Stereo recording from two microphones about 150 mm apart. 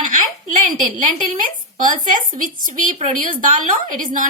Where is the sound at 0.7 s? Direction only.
60° right (ahead or behind).